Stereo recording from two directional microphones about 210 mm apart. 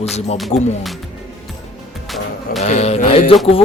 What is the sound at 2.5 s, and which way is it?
Music, 30° left (ahead or behind).